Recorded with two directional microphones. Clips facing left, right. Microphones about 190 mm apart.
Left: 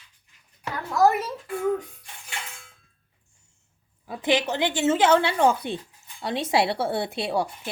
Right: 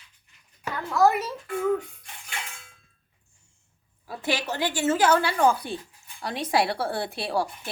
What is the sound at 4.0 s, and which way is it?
A woman's voice, 15° left (ahead or behind).